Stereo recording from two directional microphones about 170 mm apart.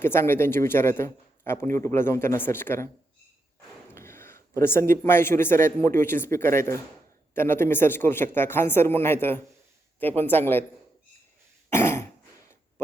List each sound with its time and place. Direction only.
0.0 s a man's voice: 15° left (ahead or behind)
3.9 s a man's voice: 15° left (ahead or behind)
11.7 s cough: 15° left (ahead or behind)